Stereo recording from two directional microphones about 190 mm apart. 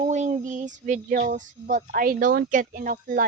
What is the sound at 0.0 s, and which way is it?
Child singing, 40° right (ahead or behind).